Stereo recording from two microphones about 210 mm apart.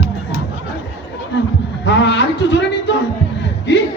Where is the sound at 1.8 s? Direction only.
55° left (ahead or behind).